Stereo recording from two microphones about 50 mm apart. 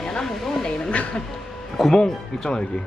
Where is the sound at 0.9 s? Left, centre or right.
Left.